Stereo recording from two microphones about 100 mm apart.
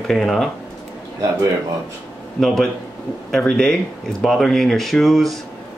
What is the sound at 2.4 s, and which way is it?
Speech, centre (ahead or behind).